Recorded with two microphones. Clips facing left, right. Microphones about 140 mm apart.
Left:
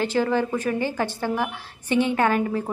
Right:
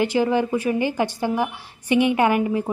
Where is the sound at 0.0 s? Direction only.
15° right (ahead or behind).